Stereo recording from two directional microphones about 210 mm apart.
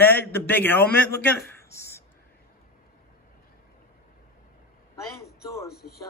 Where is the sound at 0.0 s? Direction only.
10° left (ahead or behind).